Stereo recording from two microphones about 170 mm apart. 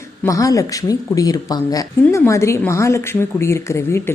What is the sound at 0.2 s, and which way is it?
Speech, 20° left (ahead or behind).